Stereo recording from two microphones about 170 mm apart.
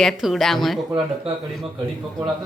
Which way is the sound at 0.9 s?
30° right (ahead or behind).